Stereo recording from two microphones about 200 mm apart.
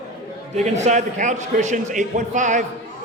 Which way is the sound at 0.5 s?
35° right (ahead or behind).